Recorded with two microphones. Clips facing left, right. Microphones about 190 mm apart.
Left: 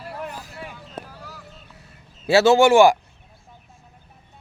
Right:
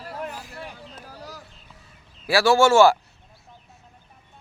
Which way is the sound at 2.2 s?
25° left (ahead or behind).